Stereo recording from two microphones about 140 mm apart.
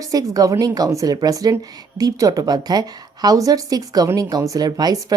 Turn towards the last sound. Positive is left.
turn(degrees=-25)  # may be behind; listen again after turning